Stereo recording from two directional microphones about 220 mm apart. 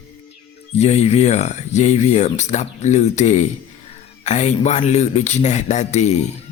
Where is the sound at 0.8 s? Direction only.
30° left (ahead or behind).